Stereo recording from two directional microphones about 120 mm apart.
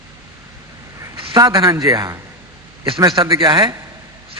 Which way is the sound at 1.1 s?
45° right (ahead or behind).